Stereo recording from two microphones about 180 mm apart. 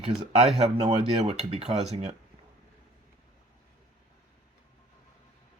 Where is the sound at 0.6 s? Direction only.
35° right (ahead or behind).